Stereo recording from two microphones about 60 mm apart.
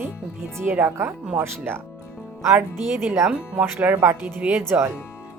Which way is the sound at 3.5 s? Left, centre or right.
Right.